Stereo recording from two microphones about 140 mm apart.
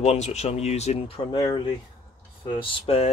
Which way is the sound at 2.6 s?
40° left (ahead or behind).